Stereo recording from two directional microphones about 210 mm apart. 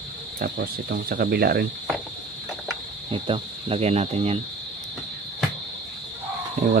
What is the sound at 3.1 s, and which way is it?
Cricket, 25° right (ahead or behind).